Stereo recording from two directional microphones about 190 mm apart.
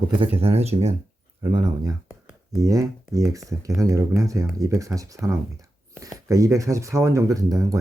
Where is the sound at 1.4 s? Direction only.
25° right (ahead or behind).